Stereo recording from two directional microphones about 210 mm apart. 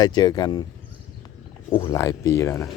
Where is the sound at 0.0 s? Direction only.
20° left (ahead or behind).